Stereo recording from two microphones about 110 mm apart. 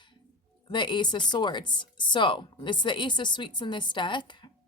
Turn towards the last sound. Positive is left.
turn(degrees=45)  # may be behind; listen again after turning